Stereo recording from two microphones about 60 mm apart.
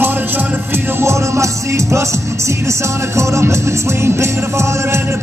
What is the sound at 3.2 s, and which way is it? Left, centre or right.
Music, right.